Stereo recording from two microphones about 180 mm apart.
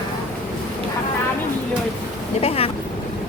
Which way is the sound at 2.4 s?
35° left (ahead or behind).